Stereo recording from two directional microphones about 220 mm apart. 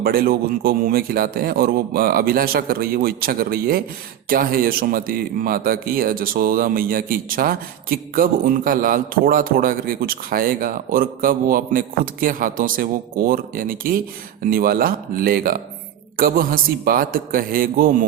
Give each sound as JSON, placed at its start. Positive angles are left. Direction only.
{"t": 0.0, "sound": "a man's voice", "side_deg": -45}